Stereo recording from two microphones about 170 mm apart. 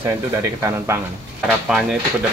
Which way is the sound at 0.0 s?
15° right (ahead or behind).